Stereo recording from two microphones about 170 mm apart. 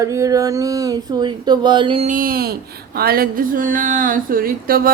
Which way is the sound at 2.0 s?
55° right (ahead or behind).